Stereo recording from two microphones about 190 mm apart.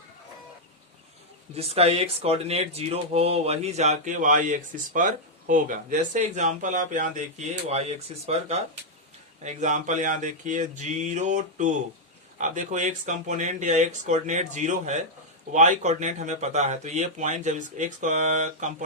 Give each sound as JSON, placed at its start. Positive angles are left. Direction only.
{"t": 1.5, "sound": "speech", "side_deg": -30}